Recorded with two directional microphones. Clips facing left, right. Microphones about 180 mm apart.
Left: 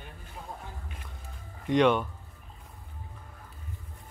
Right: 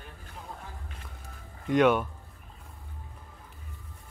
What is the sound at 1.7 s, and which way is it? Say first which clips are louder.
Speech: even; 5° right (ahead or behind).